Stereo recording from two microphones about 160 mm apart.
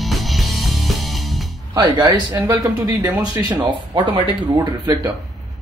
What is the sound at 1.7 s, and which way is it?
Speech, 25° right (ahead or behind).